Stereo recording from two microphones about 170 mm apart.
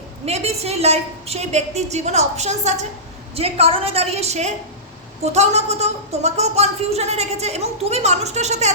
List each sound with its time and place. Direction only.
0.3 s a woman's voice: 40° right (ahead or behind)